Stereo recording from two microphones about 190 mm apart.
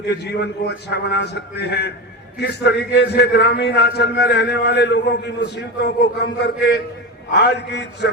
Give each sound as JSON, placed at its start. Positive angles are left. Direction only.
{"t": 0.0, "sound": "a man's voice", "side_deg": 60}